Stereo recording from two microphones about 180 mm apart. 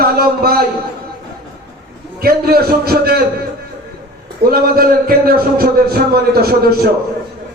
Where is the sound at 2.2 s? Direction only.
60° right (ahead or behind).